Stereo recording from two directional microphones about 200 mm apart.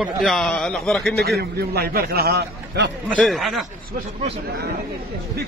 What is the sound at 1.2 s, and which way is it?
A man's voice, 50° right (ahead or behind).